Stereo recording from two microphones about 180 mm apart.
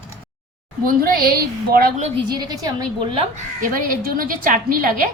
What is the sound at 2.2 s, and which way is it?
Speech, 25° right (ahead or behind).